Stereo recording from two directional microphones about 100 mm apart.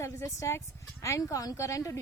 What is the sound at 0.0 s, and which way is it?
A woman's voice, 30° left (ahead or behind).